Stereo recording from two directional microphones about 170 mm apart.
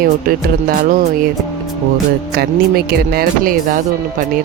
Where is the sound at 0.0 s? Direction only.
60° right (ahead or behind).